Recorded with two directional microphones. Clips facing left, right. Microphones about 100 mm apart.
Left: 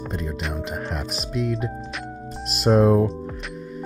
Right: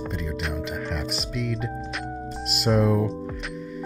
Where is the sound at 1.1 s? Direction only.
40° left (ahead or behind).